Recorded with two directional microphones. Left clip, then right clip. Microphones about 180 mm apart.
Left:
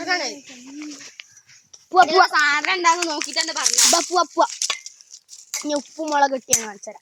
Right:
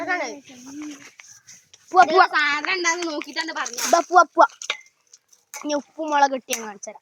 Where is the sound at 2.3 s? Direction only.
35° right (ahead or behind).